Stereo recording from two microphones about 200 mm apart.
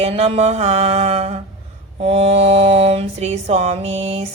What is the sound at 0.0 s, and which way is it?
Mantra, 30° right (ahead or behind).